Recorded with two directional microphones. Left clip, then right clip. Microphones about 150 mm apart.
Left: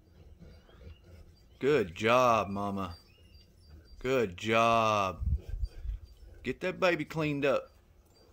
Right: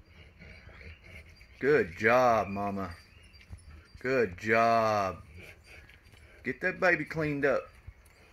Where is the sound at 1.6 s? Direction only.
5° left (ahead or behind).